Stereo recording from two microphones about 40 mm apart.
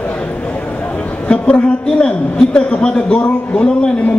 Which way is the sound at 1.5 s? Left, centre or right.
Left.